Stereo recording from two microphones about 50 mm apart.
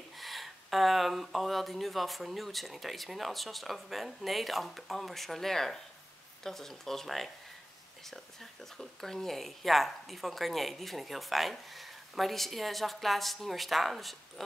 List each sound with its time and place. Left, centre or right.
0.2 s speech: centre